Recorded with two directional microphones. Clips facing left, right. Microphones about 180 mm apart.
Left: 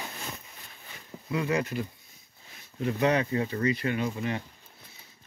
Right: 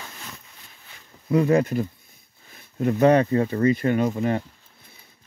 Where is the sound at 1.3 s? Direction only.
45° right (ahead or behind).